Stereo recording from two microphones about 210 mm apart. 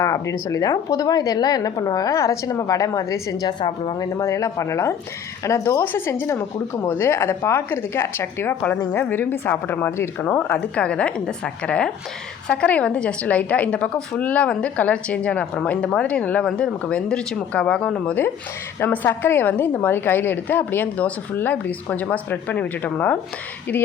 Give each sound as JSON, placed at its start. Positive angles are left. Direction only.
{"t": 0.0, "sound": "a woman's voice", "side_deg": 15}